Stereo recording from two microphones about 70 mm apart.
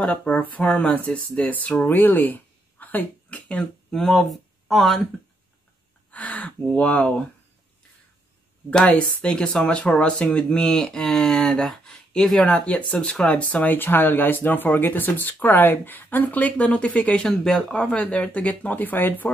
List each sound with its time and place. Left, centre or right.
0.0 s speech: centre
4.0 s speech: centre
6.1 s speech: left
8.6 s speech: centre
13.7 s speech: left